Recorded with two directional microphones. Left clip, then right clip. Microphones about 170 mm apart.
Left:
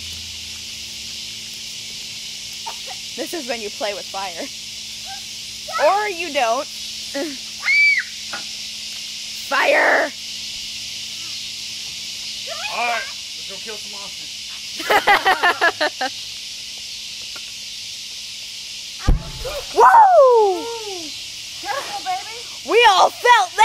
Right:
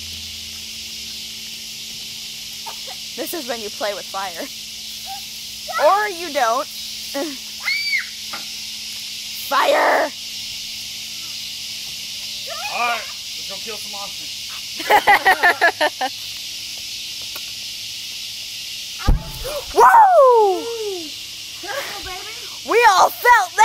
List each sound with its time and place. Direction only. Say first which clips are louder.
3.2 s speech: even; 10° left (ahead or behind)
5.7 s speech: right 1 dB; 10° left (ahead or behind)
9.5 s speech: even; 10° left (ahead or behind)
12.7 s speech: right 1 dB; centre (ahead or behind)
14.8 s speech: right 2 dB; 5° left (ahead or behind)
19.7 s speech: even; 35° right (ahead or behind)
22.7 s speech: even; 5° left (ahead or behind)